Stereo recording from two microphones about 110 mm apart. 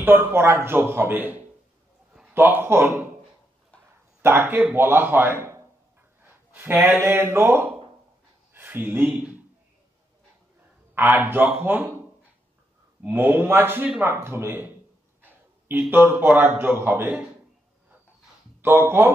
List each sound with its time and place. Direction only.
0.0 s a man's voice: 20° right (ahead or behind)
4.2 s a man's voice: 20° right (ahead or behind)
11.0 s speech: 20° right (ahead or behind)
13.0 s a man's voice: 15° right (ahead or behind)
18.6 s a man's voice: 20° right (ahead or behind)